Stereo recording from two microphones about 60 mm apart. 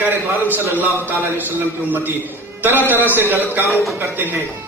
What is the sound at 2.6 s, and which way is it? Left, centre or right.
Speech, right.